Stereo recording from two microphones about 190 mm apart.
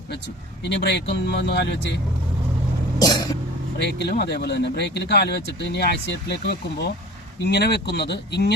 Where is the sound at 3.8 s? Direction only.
60° left (ahead or behind).